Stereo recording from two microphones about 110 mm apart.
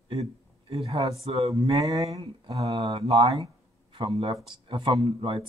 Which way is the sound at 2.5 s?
65° right (ahead or behind).